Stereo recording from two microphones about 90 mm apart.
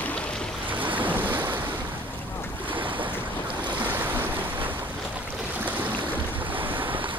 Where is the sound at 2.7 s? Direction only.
70° right (ahead or behind).